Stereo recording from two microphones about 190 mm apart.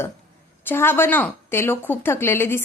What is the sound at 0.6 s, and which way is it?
A woman's voice, 10° left (ahead or behind).